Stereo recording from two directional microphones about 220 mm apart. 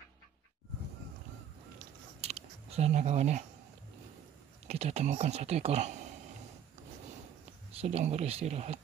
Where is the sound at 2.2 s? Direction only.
30° right (ahead or behind).